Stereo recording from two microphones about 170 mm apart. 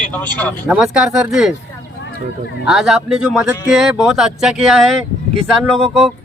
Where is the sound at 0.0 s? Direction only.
10° left (ahead or behind).